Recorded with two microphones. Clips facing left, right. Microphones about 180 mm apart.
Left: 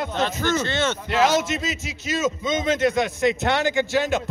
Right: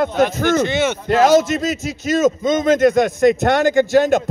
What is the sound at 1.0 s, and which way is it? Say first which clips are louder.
A man's voice: right 9 dB; 45° right (ahead or behind).